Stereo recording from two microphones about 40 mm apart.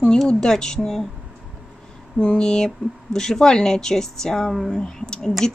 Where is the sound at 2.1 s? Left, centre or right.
Left.